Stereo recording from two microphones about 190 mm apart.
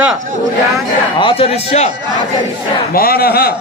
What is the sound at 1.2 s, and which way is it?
Speech, 30° left (ahead or behind).